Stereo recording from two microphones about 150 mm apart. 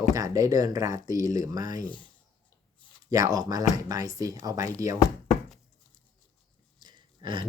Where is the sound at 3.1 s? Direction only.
20° right (ahead or behind).